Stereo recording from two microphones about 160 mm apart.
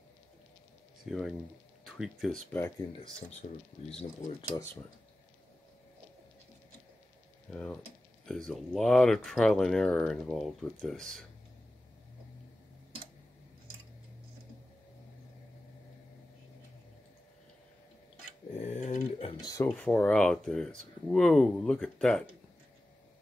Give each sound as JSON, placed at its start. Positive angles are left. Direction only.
{"t": 1.0, "sound": "speech", "side_deg": 0}
{"t": 4.4, "sound": "speech", "side_deg": 20}
{"t": 7.5, "sound": "speech", "side_deg": 5}
{"t": 18.6, "sound": "a sound", "side_deg": 45}
{"t": 19.4, "sound": "speech", "side_deg": 20}
{"t": 19.7, "sound": "speech", "side_deg": 10}